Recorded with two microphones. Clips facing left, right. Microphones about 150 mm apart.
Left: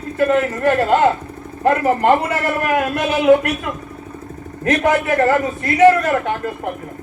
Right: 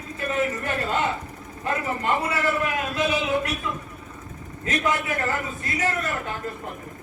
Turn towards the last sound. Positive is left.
turn(degrees=70)  # may be behind; listen again after turning